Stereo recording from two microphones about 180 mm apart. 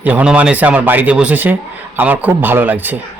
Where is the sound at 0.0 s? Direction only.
10° right (ahead or behind).